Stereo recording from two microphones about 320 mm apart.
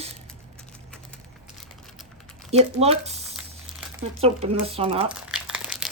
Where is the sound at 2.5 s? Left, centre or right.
Centre.